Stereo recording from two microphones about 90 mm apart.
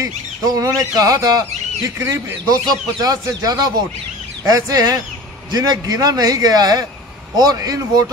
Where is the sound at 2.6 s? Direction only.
45° right (ahead or behind).